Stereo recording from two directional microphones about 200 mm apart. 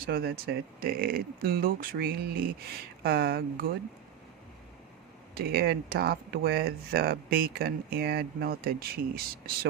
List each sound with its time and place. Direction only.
0.0 s speech: 50° right (ahead or behind)
5.3 s speech: 50° right (ahead or behind)